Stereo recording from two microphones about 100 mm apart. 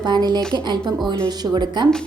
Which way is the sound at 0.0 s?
45° right (ahead or behind).